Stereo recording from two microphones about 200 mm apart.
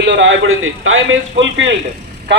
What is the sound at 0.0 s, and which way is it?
A man's voice, 65° right (ahead or behind).